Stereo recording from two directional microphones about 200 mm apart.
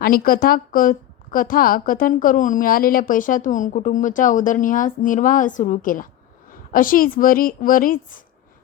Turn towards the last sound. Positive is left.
turn(degrees=45)  # may be behind; listen again after turning